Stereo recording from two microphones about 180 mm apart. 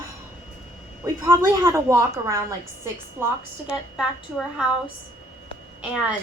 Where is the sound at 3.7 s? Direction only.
Centre (ahead or behind).